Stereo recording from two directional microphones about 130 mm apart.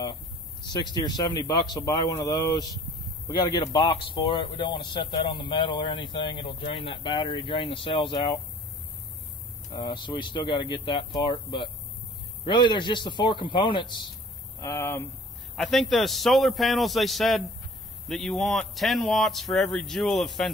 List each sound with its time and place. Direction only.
0.7 s a man's voice: 35° left (ahead or behind)
9.7 s a man's voice: 40° left (ahead or behind)
14.6 s speech: 20° left (ahead or behind)
15.5 s speech: centre (ahead or behind)